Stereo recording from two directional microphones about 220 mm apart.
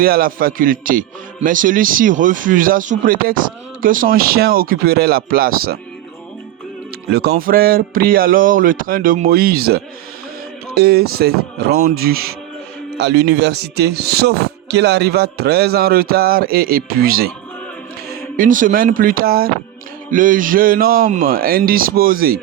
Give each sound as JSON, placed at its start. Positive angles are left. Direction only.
{"t": 0.0, "sound": "a man's voice", "side_deg": -40}
{"t": 7.1, "sound": "a man's voice", "side_deg": -45}
{"t": 18.3, "sound": "a man's voice", "side_deg": -35}